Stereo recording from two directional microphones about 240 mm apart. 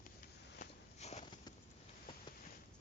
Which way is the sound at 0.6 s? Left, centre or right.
Left.